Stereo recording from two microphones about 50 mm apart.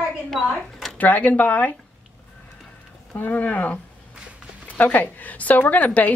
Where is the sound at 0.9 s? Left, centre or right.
Left.